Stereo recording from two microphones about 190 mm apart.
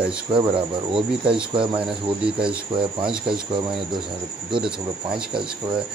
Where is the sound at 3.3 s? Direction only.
25° right (ahead or behind).